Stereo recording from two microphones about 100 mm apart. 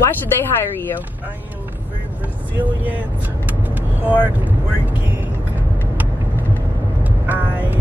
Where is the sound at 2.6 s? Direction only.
15° right (ahead or behind).